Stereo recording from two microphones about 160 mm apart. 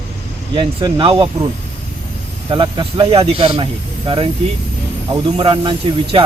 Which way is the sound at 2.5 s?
30° right (ahead or behind).